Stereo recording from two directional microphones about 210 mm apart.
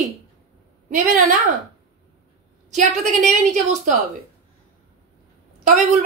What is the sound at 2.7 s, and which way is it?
Speech, 35° right (ahead or behind).